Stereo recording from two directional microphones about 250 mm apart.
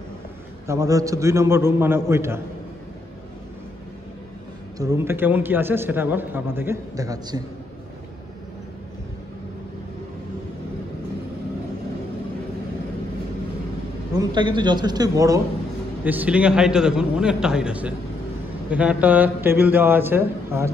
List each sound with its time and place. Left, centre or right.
0.7 s a man's voice: centre
4.7 s a man's voice: centre
14.1 s a man's voice: centre